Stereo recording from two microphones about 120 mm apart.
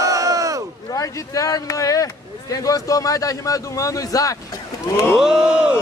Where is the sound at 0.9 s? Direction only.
30° left (ahead or behind).